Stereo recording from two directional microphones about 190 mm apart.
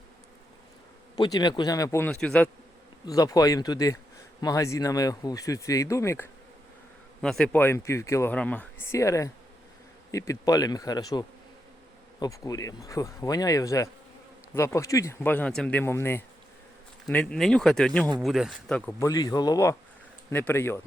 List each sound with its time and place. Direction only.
1.1 s speech: 20° left (ahead or behind)
3.1 s speech: 20° left (ahead or behind)
7.2 s speech: 5° left (ahead or behind)
18.9 s speech: 15° left (ahead or behind)